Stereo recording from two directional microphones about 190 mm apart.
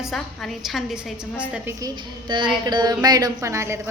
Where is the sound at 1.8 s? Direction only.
20° right (ahead or behind).